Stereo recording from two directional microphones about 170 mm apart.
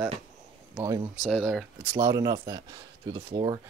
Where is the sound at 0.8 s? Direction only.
20° right (ahead or behind).